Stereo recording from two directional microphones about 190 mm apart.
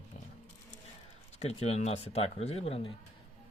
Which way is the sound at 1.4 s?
35° left (ahead or behind).